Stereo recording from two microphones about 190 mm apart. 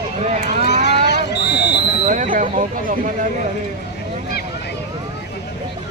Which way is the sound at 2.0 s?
40° right (ahead or behind).